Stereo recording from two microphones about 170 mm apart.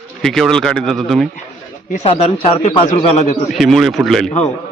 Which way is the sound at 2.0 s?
35° left (ahead or behind).